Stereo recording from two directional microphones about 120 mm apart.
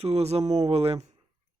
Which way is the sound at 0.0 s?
60° right (ahead or behind).